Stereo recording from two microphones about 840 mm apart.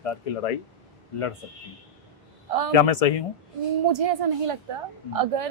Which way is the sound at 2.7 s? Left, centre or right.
Left.